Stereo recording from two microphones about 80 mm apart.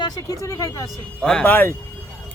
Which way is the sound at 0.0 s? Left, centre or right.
Left.